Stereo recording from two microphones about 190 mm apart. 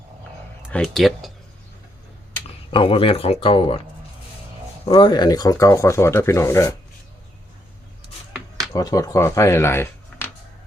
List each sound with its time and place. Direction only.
0.7 s speech: centre (ahead or behind)
2.6 s speech: 30° left (ahead or behind)
4.9 s speech: 25° left (ahead or behind)
8.7 s speech: 20° left (ahead or behind)